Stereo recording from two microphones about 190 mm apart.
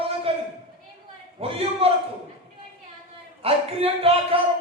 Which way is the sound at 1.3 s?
30° right (ahead or behind).